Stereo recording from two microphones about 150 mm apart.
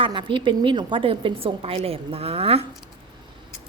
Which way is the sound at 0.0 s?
35° right (ahead or behind).